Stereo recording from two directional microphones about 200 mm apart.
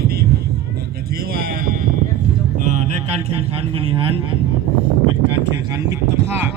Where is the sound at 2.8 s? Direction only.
30° right (ahead or behind).